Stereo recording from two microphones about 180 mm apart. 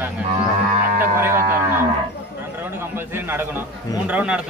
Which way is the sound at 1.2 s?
15° right (ahead or behind).